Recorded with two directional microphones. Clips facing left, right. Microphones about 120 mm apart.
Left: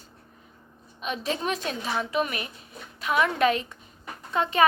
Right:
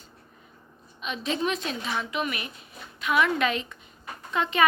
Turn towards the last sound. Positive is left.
turn(degrees=40)  # may be behind; listen again after turning